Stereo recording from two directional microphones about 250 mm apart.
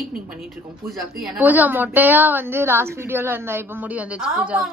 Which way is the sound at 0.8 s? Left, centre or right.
Centre.